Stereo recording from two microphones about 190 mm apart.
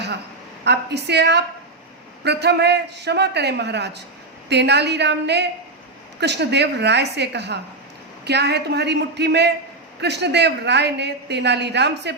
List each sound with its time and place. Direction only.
0.6 s a woman's voice: 60° right (ahead or behind)